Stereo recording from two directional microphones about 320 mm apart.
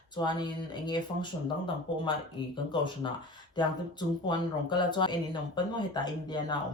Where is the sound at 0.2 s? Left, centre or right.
Centre.